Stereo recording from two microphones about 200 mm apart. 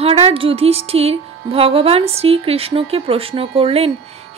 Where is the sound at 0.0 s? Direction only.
30° right (ahead or behind).